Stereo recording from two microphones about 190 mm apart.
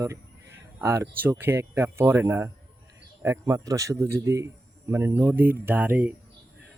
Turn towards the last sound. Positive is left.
turn(degrees=-10)  # may be behind; listen again after turning